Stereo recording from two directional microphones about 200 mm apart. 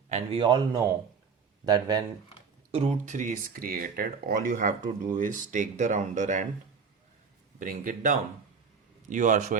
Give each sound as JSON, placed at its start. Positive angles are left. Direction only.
{"t": 0.1, "sound": "a man's voice", "side_deg": -25}
{"t": 2.8, "sound": "speech", "side_deg": -40}
{"t": 7.6, "sound": "speech", "side_deg": -40}